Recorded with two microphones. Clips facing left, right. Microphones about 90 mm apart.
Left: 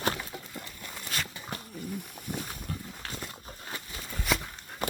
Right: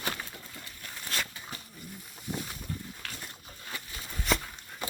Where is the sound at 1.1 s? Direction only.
5° left (ahead or behind).